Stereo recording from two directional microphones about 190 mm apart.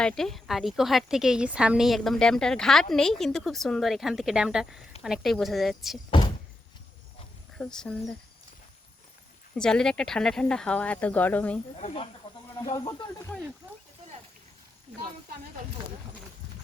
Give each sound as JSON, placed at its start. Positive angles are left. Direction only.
{"t": 0.0, "sound": "a woman's voice", "side_deg": 5}
{"t": 6.1, "sound": "door", "side_deg": 25}
{"t": 7.6, "sound": "a woman's voice", "side_deg": 5}
{"t": 9.6, "sound": "a woman's voice", "side_deg": 5}
{"t": 11.8, "sound": "speech", "side_deg": 35}
{"t": 12.7, "sound": "speech", "side_deg": 20}